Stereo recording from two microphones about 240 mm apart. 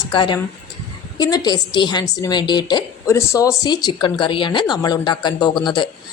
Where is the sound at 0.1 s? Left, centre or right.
Centre.